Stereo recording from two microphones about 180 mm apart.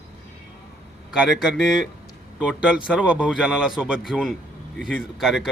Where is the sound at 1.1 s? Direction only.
5° right (ahead or behind).